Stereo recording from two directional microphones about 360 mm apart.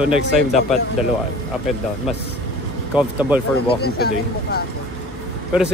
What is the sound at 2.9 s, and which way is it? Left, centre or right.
Speech, centre.